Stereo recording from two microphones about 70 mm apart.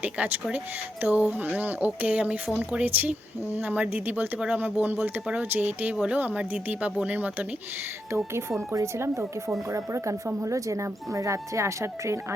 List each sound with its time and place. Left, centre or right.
0.0 s speech: right
8.1 s speech: right